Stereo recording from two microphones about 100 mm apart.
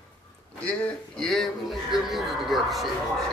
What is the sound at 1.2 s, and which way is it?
Music, 5° left (ahead or behind).